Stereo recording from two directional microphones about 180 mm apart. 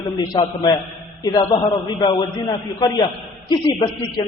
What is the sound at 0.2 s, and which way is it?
A man's voice, 20° left (ahead or behind).